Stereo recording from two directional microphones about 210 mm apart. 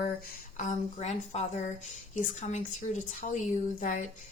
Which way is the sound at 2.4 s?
35° left (ahead or behind).